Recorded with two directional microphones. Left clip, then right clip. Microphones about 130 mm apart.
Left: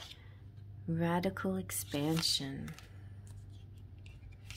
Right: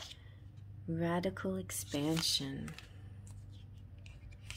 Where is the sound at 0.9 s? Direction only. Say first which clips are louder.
Left 1 dB; 25° left (ahead or behind).